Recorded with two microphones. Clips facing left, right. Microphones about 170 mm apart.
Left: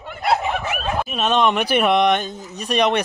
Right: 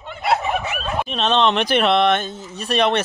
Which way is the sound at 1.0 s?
10° left (ahead or behind).